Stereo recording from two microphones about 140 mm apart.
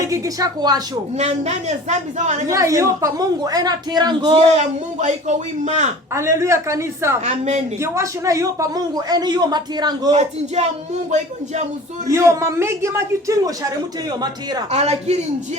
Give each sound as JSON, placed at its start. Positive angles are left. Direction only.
{"t": 0.0, "sound": "speech", "side_deg": -25}
{"t": 1.2, "sound": "a man's voice", "side_deg": -50}
{"t": 2.5, "sound": "a woman's voice", "side_deg": -20}
{"t": 4.4, "sound": "a man's voice", "side_deg": -55}
{"t": 6.1, "sound": "a woman's voice", "side_deg": -20}
{"t": 7.3, "sound": "a man's voice", "side_deg": -55}
{"t": 7.9, "sound": "a woman's voice", "side_deg": -20}
{"t": 10.2, "sound": "a man's voice", "side_deg": -50}
{"t": 12.0, "sound": "a woman's voice", "side_deg": -20}
{"t": 14.7, "sound": "a man's voice", "side_deg": -55}